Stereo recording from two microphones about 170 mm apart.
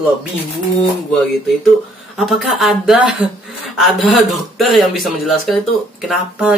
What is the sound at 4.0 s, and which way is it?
Speech, centre (ahead or behind).